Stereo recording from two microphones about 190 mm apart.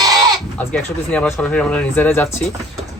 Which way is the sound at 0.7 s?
5° left (ahead or behind).